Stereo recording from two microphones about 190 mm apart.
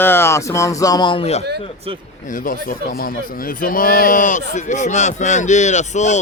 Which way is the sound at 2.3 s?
45° left (ahead or behind).